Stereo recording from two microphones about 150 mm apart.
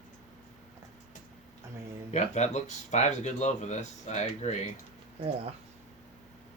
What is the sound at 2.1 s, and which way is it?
Speech, 50° left (ahead or behind).